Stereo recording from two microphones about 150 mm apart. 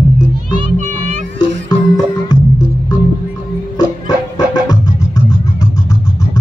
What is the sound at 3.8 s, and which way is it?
Music, 25° left (ahead or behind).